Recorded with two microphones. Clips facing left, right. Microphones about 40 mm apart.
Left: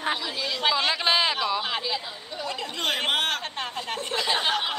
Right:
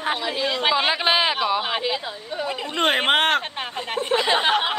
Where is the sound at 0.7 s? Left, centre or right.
Right.